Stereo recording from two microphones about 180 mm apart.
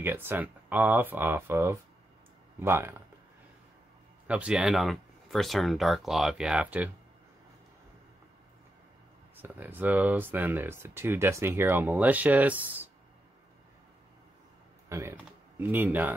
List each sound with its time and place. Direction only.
0.0 s speech: 10° right (ahead or behind)
4.3 s speech: 5° right (ahead or behind)
9.4 s speech: 10° right (ahead or behind)
14.9 s speech: 15° right (ahead or behind)